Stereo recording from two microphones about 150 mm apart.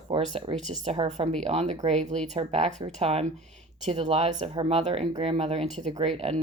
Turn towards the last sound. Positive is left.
turn(degrees=-40)  # may be behind; listen again after turning